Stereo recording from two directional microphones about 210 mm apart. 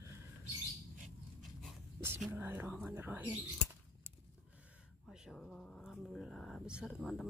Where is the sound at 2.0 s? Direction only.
10° right (ahead or behind).